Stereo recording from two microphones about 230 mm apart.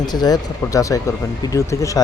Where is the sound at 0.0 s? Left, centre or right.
Centre.